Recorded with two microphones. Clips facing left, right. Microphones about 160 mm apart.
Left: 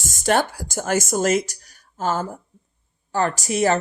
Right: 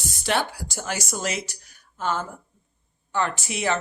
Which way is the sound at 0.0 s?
45° left (ahead or behind).